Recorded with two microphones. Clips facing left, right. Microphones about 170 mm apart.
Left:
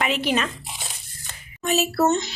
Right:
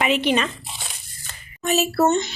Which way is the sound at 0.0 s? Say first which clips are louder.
Right 3 dB; centre (ahead or behind).